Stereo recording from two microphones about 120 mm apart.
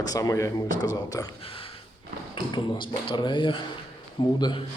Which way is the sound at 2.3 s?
45° left (ahead or behind).